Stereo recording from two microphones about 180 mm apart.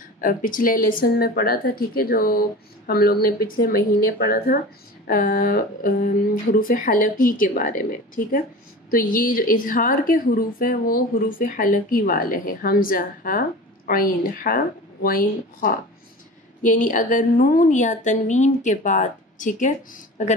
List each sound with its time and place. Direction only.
0.2 s a woman's voice: 50° left (ahead or behind)